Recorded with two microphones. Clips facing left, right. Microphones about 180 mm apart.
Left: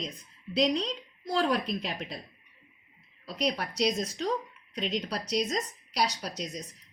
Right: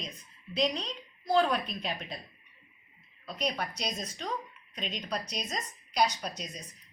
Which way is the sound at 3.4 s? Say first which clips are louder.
Left 5 dB; 85° left.